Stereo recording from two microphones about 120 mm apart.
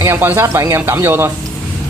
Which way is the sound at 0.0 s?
20° right (ahead or behind).